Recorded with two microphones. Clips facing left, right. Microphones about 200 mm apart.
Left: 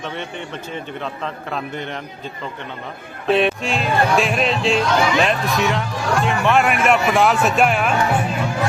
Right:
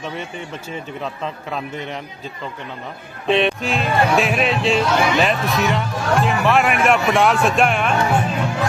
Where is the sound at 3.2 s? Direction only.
5° left (ahead or behind).